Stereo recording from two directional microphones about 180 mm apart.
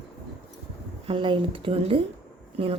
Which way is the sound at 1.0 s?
30° right (ahead or behind).